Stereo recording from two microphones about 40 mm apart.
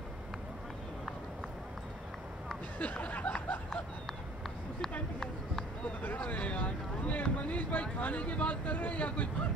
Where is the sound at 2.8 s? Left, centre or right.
Left.